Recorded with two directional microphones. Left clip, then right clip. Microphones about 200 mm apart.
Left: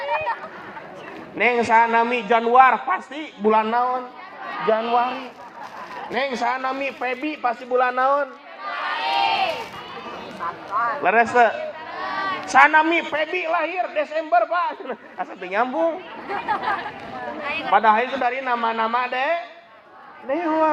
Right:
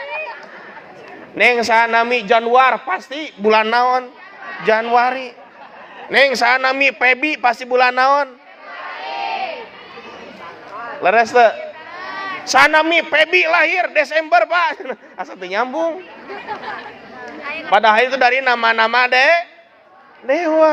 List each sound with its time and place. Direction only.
0.0 s a sound: 15° left (ahead or behind)
1.4 s a man's voice: 60° right (ahead or behind)
4.7 s a man's voice: 80° right
6.1 s a man's voice: 65° right (ahead or behind)
8.7 s crowd: 10° left (ahead or behind)
11.0 s a man's voice: 55° right (ahead or behind)
12.1 s a sound: 10° left (ahead or behind)
12.5 s a man's voice: 60° right (ahead or behind)
15.2 s speech: 50° right (ahead or behind)
16.3 s speech: 15° left (ahead or behind)
17.7 s a man's voice: 70° right (ahead or behind)